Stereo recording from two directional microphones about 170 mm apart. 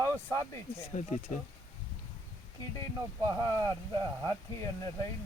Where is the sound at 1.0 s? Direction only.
45° left (ahead or behind).